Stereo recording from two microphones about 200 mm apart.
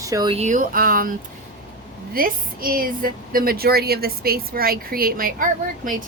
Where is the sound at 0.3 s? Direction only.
40° right (ahead or behind).